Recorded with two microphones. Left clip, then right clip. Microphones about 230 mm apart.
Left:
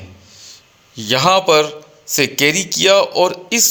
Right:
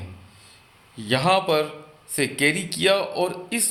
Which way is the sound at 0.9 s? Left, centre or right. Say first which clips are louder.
Left 7 dB; left.